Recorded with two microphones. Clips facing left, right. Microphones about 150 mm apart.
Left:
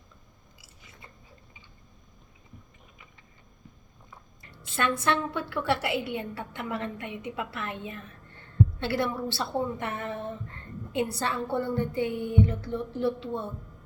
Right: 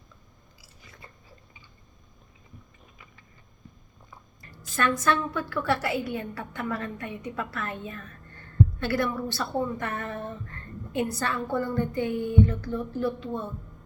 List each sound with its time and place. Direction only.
0.6 s biting: 20° left (ahead or behind)
4.5 s a woman's voice: 25° left (ahead or behind)